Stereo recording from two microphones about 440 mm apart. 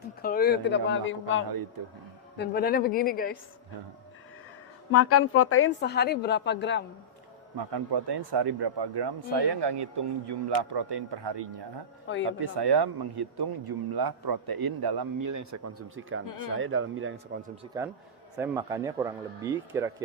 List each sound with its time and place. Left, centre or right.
0.2 s a woman's voice: centre
4.9 s a woman's voice: left
7.5 s a man's voice: right
15.3 s speech: right
16.2 s speech: left
16.6 s speech: right
17.7 s speech: centre